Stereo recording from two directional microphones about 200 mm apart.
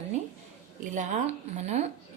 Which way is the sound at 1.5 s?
35° right (ahead or behind).